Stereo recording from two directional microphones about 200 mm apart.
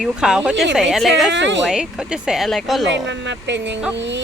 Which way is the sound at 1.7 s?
5° right (ahead or behind).